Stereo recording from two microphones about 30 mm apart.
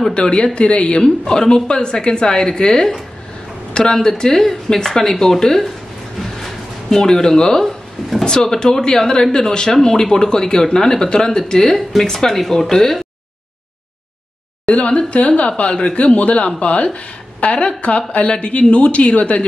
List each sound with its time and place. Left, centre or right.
0.1 s a woman's voice: left
1.0 s speech: left
6.3 s music: centre
7.1 s speech: left
8.7 s speech: left
14.7 s speech: left